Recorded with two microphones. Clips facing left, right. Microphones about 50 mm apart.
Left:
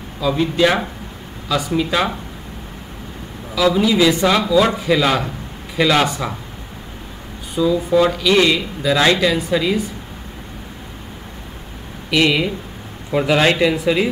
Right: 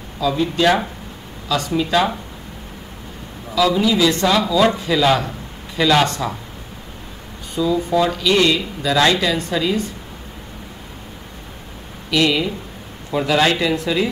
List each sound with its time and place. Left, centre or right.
0.2 s speech: centre
3.5 s speech: centre
7.6 s speech: centre
12.1 s speech: centre